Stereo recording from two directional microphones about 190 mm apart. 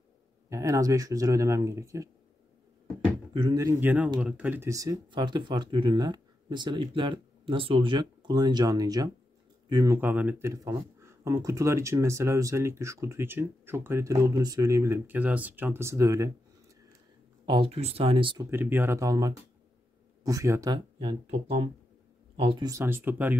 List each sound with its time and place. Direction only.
0.5 s speech: 15° right (ahead or behind)
3.3 s speech: 20° right (ahead or behind)
17.5 s speech: 30° right (ahead or behind)
18.5 s speech: 10° right (ahead or behind)